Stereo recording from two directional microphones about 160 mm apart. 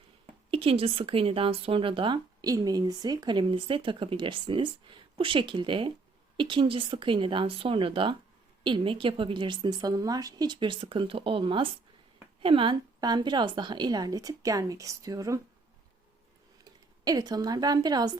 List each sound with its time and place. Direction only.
0.5 s a woman's voice: 35° right (ahead or behind)
17.0 s a woman's voice: 25° right (ahead or behind)